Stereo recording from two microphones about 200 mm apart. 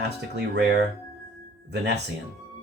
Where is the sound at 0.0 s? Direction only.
55° right (ahead or behind).